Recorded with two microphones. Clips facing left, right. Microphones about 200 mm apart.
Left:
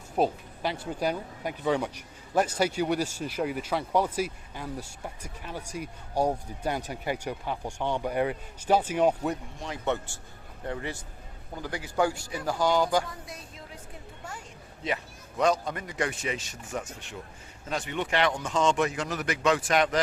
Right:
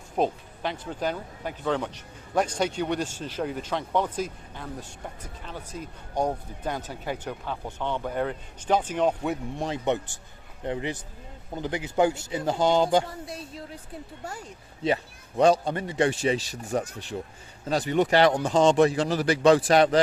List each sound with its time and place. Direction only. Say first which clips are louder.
0.2 s speech: even; 5° left (ahead or behind)
9.6 s a man's voice: right 3 dB; 20° right (ahead or behind)
14.8 s a man's voice: right 6 dB; 30° right (ahead or behind)